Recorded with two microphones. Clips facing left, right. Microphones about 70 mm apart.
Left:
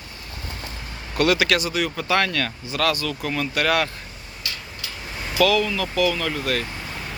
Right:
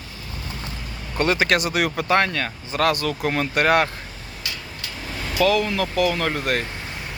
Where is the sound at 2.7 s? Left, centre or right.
Right.